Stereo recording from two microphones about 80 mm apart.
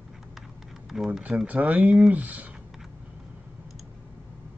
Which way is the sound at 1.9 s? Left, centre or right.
Centre.